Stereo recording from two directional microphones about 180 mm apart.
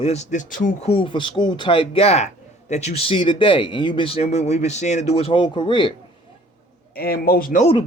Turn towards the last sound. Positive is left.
turn(degrees=30)  # may be behind; listen again after turning